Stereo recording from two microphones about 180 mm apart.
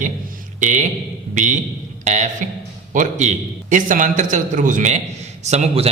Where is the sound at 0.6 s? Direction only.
45° right (ahead or behind).